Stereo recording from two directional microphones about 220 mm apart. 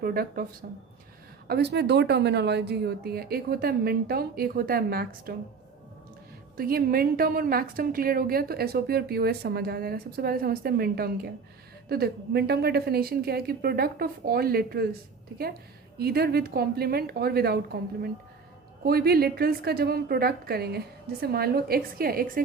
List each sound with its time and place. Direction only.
0.0 s a woman's voice: 40° right (ahead or behind)
6.6 s a woman's voice: 45° right (ahead or behind)
16.0 s a woman's voice: 45° right (ahead or behind)
18.9 s a woman's voice: 45° right (ahead or behind)